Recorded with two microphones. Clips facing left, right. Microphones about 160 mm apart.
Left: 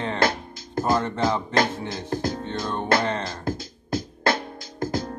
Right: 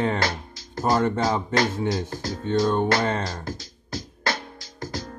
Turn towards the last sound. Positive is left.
turn(degrees=50)  # may be behind; listen again after turning